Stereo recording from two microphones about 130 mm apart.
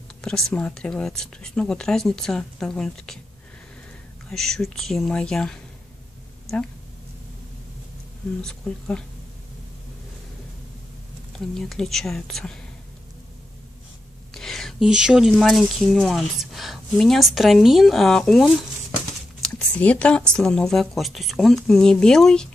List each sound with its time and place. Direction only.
0.2 s speech: 5° left (ahead or behind)
4.3 s speech: centre (ahead or behind)
8.4 s speech: 5° left (ahead or behind)
11.3 s speech: 5° left (ahead or behind)
14.3 s speech: 5° left (ahead or behind)